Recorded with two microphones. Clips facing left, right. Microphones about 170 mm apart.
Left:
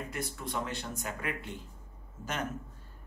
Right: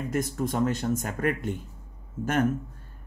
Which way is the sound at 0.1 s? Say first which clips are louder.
Right 9 dB; 45° right (ahead or behind).